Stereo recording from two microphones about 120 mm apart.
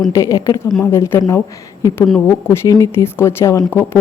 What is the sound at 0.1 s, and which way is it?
Speech, 25° left (ahead or behind).